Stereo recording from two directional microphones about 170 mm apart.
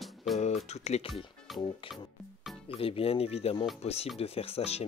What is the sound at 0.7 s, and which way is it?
Speech, 40° left (ahead or behind).